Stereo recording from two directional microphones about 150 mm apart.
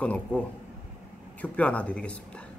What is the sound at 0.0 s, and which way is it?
Speech, 10° left (ahead or behind).